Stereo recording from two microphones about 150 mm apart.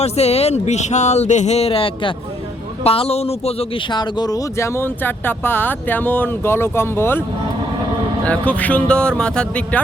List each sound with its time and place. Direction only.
0.0 s speech: 45° left (ahead or behind)
3.9 s speech: 25° left (ahead or behind)
8.2 s speech: 10° left (ahead or behind)